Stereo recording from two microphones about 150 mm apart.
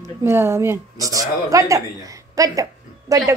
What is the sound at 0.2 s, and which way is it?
A woman's voice, 15° right (ahead or behind).